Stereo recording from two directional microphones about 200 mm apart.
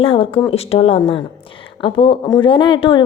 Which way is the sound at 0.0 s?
25° left (ahead or behind).